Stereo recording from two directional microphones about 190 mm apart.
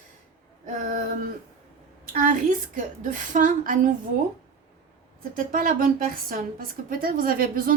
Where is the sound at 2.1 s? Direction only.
45° right (ahead or behind).